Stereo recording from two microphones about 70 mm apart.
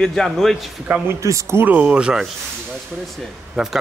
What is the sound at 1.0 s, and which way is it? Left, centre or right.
Speech, right.